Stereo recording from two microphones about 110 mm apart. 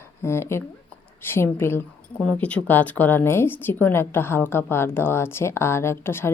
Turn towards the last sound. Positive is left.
turn(degrees=20)  # may be behind; listen again after turning